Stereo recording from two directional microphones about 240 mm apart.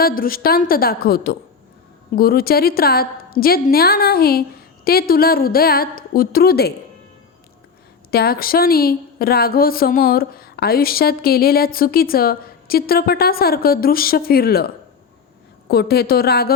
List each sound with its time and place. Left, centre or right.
0.0 s a woman's voice: left
8.1 s a woman's voice: left
15.7 s a woman's voice: left